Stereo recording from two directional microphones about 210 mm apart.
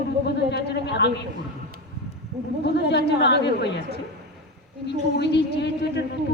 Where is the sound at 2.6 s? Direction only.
55° left (ahead or behind).